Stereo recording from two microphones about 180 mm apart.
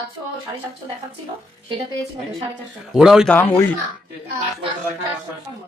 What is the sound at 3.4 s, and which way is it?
Speech, 10° left (ahead or behind).